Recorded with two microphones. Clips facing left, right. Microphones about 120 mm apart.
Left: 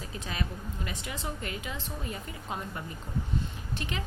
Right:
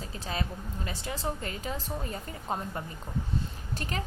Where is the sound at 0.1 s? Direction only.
35° right (ahead or behind).